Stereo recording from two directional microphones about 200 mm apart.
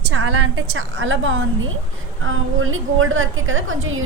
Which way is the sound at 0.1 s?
90° right.